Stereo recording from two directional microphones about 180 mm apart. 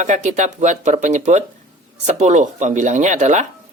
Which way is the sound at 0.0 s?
40° right (ahead or behind).